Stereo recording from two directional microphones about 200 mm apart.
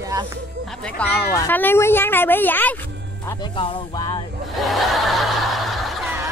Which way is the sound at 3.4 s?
25° left (ahead or behind).